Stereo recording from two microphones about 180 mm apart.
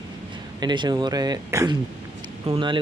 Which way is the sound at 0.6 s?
25° right (ahead or behind).